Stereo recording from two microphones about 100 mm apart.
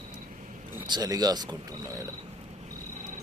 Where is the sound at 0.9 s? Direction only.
40° right (ahead or behind).